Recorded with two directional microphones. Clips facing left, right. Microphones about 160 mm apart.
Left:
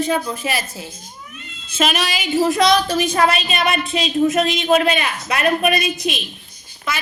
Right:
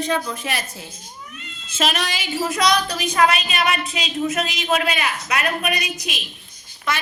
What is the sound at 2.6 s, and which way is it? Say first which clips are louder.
A woman's voice: left 5 dB; 25° left (ahead or behind).